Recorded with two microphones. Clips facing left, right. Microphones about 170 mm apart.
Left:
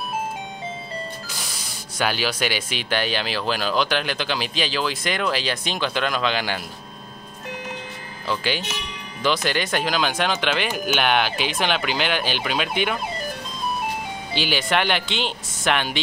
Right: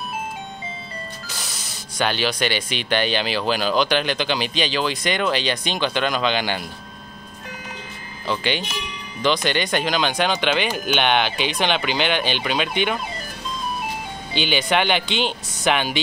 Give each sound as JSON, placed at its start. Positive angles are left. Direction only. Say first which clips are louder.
{"t": 2.0, "sound": "speech", "louder": "right 2 dB", "side_deg": 5}
{"t": 8.3, "sound": "speech", "louder": "right 1 dB", "side_deg": 0}
{"t": 14.3, "sound": "speech", "louder": "right 2 dB", "side_deg": 0}